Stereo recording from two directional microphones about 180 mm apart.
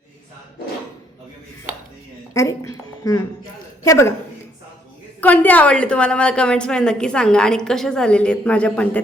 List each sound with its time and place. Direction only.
2.3 s a woman's voice: 15° left (ahead or behind)
5.2 s a woman's voice: 10° left (ahead or behind)